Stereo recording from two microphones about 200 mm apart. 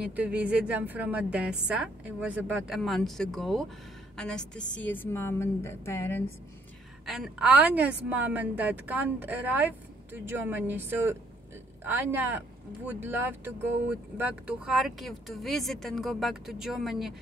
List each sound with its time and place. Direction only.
0.0 s a woman's voice: 5° right (ahead or behind); by 6.2 s 10° left (ahead or behind)
7.1 s a woman's voice: 5° right (ahead or behind)